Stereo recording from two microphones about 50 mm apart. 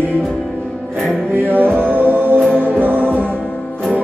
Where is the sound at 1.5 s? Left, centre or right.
Right.